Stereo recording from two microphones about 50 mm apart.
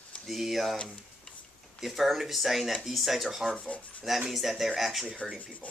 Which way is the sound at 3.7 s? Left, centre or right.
Left.